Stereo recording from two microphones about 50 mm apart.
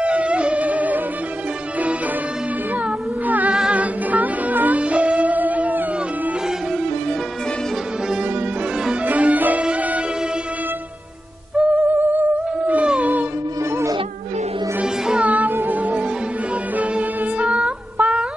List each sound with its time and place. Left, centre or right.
0.0 s music: right
3.3 s music: right
4.7 s music: right
5.2 s music: right
9.0 s music: right
11.5 s music: right
15.2 s music: right